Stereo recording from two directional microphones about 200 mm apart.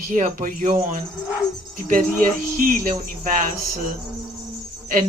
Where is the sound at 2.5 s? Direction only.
45° right (ahead or behind).